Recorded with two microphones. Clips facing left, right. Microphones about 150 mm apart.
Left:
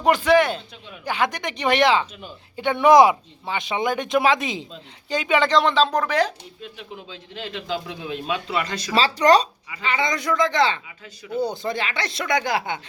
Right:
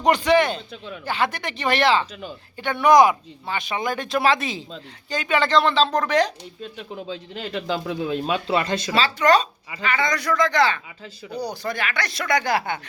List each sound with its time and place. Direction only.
0.0 s speech: 5° left (ahead or behind)
6.6 s a man's voice: 40° right (ahead or behind)
9.0 s speech: 35° left (ahead or behind)
9.8 s speech: 20° left (ahead or behind)